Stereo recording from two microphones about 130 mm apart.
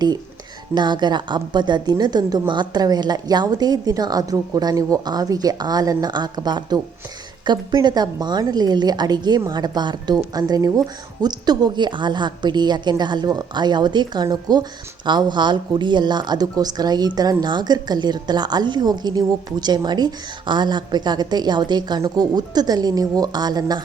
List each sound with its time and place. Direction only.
0.7 s a woman's voice: 35° right (ahead or behind)